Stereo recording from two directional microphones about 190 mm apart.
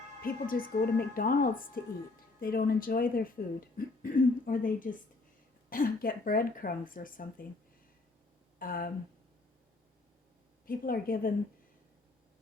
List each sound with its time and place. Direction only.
0.2 s speech: 50° left (ahead or behind)
8.5 s speech: 50° left (ahead or behind)
10.7 s speech: 50° left (ahead or behind)